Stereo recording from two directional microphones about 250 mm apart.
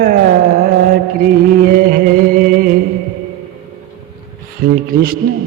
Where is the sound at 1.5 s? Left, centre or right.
Right.